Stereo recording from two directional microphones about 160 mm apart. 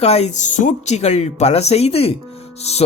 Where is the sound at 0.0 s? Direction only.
40° left (ahead or behind).